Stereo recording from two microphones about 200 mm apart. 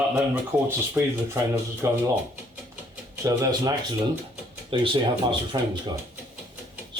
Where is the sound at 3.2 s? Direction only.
15° right (ahead or behind).